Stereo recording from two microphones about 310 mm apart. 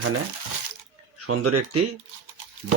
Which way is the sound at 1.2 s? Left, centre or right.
Right.